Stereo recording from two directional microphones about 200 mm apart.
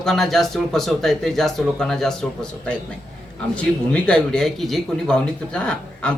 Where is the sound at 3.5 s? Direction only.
5° left (ahead or behind).